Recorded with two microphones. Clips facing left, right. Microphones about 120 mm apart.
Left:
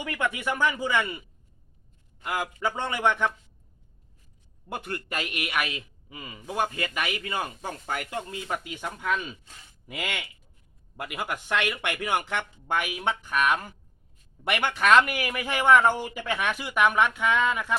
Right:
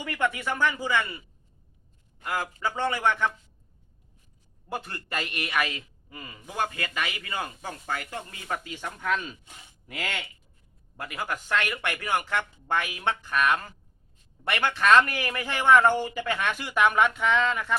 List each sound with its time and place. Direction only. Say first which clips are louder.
0.0 s speech: right 1 dB; 15° left (ahead or behind)
2.2 s speech: left 1 dB; 15° left (ahead or behind)
4.7 s speech: even; 15° left (ahead or behind)